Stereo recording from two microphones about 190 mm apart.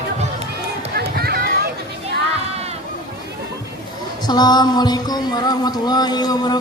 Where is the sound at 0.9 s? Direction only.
55° right (ahead or behind).